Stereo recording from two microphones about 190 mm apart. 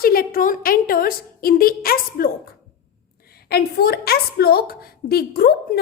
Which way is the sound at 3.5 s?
55° left (ahead or behind).